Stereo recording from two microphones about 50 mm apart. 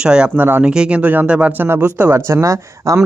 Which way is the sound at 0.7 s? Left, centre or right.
Centre.